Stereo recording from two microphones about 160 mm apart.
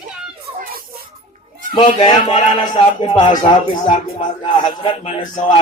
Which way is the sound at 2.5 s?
30° left (ahead or behind).